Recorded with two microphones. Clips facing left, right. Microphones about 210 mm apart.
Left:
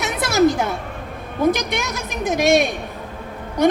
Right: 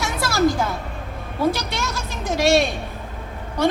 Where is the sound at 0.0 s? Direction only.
20° left (ahead or behind).